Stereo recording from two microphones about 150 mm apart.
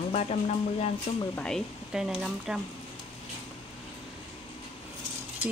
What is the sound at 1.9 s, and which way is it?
Speech, 5° right (ahead or behind).